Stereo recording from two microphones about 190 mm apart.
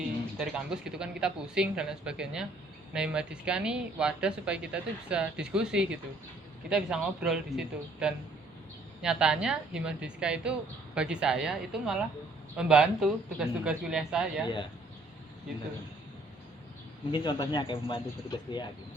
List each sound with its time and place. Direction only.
0.3 s speech: 5° right (ahead or behind)
17.1 s speech: 25° left (ahead or behind)